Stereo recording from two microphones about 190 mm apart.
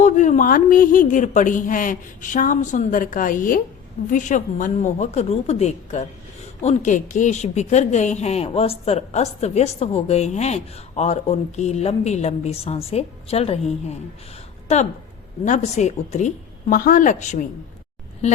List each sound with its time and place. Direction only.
0.0 s speech: 40° left (ahead or behind)
15.4 s speech: 35° left (ahead or behind)